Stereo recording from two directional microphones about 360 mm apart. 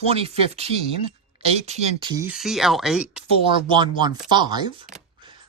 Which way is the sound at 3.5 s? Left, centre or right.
Centre.